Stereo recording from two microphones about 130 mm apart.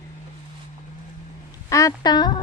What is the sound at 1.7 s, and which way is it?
Speech, 25° left (ahead or behind).